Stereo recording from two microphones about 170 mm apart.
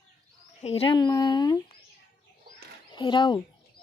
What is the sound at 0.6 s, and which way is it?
Speech, 35° left (ahead or behind).